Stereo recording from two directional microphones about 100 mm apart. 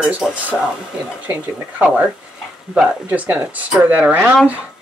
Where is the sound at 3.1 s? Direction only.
15° right (ahead or behind).